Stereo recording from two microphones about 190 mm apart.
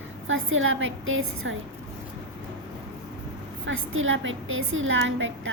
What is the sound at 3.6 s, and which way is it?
A child's voice, 90° right.